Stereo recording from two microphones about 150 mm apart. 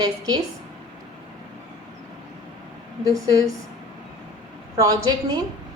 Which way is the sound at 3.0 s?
25° right (ahead or behind).